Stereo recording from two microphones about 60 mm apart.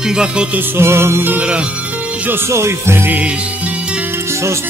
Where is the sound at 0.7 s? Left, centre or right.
Right.